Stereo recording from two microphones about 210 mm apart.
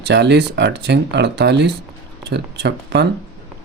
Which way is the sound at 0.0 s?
55° right (ahead or behind).